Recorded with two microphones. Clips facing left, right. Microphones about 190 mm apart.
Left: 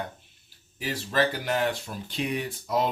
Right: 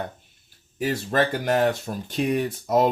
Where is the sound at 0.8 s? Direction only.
50° right (ahead or behind).